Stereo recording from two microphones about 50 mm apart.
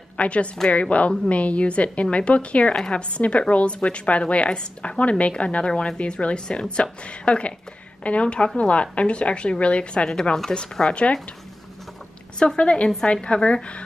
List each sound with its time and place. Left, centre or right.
0.2 s a woman's voice: left
12.4 s a woman's voice: centre